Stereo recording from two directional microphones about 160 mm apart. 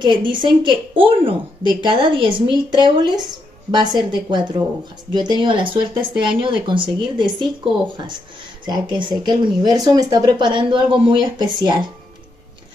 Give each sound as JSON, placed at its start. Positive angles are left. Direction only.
{"t": 0.0, "sound": "speech", "side_deg": -30}